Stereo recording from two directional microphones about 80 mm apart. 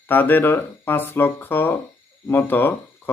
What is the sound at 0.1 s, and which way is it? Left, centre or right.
A man's voice, left.